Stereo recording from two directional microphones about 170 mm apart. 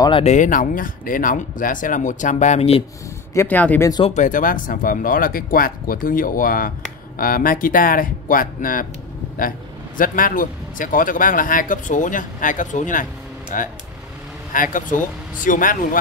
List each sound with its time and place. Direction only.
0.2 s speech: 45° left (ahead or behind)
3.3 s speech: 10° left (ahead or behind)
4.1 s speech: 50° left (ahead or behind)
9.9 s speech: 55° left (ahead or behind)